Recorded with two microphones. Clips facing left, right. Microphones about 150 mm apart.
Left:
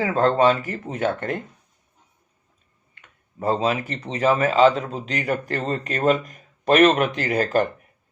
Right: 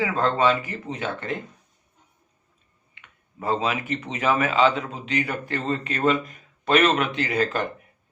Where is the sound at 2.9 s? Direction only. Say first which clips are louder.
Left 3 dB; 40° left (ahead or behind).